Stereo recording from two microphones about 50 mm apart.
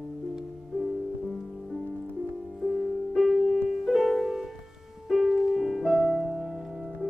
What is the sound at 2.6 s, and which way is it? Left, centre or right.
Music, centre.